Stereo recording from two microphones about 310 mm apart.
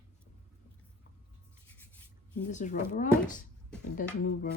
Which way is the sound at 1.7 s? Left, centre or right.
Centre.